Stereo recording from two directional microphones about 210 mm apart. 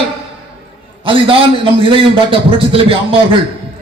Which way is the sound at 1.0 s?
25° right (ahead or behind).